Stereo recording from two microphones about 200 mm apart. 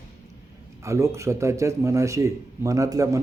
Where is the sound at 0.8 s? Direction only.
15° right (ahead or behind).